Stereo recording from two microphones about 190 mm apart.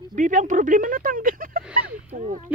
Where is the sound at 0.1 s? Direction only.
40° right (ahead or behind).